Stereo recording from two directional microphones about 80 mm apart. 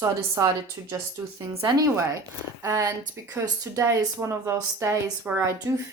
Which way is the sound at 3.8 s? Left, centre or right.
Right.